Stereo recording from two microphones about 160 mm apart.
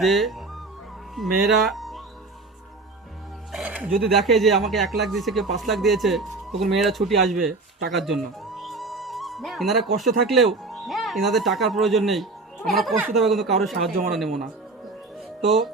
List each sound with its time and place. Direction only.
0.0 s speech: centre (ahead or behind)
3.5 s music: 5° right (ahead or behind)
4.0 s speech: centre (ahead or behind)
7.9 s music: centre (ahead or behind)
10.0 s speech: centre (ahead or behind)
15.4 s speech: centre (ahead or behind)